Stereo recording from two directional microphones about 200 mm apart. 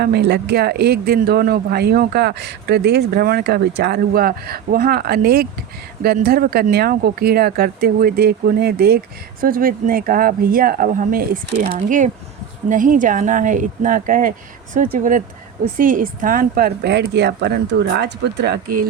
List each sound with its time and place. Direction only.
0.0 s speech: 55° right (ahead or behind)
11.6 s speech: 35° right (ahead or behind)